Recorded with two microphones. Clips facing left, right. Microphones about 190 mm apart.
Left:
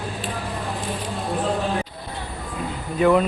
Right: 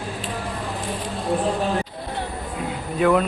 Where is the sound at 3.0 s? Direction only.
Centre (ahead or behind).